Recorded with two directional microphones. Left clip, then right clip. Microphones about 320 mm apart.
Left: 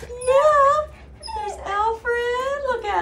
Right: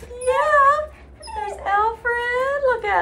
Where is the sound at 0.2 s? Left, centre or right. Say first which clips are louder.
Left 1 dB; centre.